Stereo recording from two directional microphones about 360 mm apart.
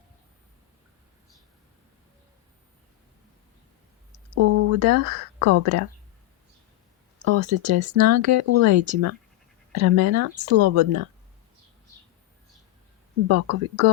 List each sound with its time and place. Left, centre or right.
4.1 s speech: right
7.3 s speech: right
13.2 s speech: right